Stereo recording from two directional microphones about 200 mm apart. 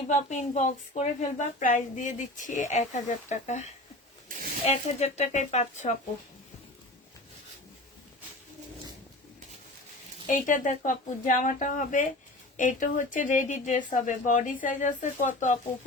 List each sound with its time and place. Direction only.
0.1 s a woman's voice: 35° left (ahead or behind)
4.3 s a sound: 45° right (ahead or behind)
4.6 s a woman's voice: 35° left (ahead or behind)
10.2 s a woman's voice: 40° left (ahead or behind)